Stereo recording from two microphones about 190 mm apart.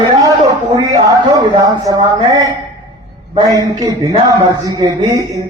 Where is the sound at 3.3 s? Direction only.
20° right (ahead or behind).